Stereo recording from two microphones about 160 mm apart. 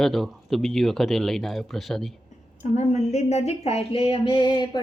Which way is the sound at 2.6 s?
45° left (ahead or behind).